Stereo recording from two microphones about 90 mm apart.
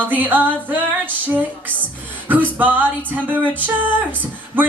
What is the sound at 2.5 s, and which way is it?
Music, 20° right (ahead or behind).